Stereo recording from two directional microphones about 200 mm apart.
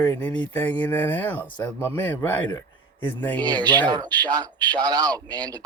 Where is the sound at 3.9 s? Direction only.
20° right (ahead or behind).